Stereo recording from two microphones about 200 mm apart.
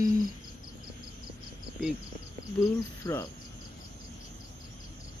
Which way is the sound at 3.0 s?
15° left (ahead or behind).